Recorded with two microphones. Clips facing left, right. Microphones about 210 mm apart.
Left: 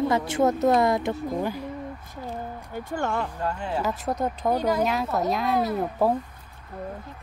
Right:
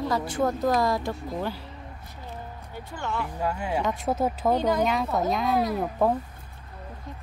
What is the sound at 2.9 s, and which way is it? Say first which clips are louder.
Speech: left 4 dB; 45° left (ahead or behind).